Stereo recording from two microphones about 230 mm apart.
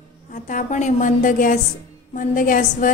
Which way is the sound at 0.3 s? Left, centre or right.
Left.